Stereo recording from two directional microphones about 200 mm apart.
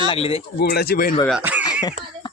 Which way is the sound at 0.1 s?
30° left (ahead or behind).